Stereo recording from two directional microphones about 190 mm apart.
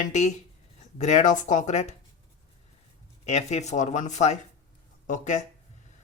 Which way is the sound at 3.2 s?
35° left (ahead or behind).